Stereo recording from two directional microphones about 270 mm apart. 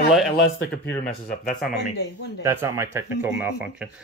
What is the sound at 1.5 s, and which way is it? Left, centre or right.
Speech, centre.